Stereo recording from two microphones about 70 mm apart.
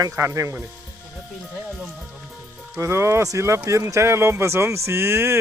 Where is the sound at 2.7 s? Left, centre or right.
Right.